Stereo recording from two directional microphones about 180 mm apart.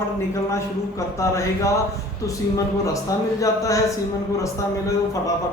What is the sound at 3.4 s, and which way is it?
Speech, 20° left (ahead or behind).